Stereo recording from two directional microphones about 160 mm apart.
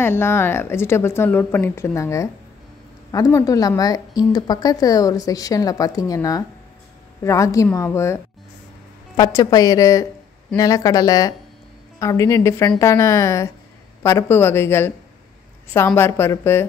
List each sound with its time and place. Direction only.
0.0 s speech: 15° left (ahead or behind)
15.9 s speech: 15° left (ahead or behind)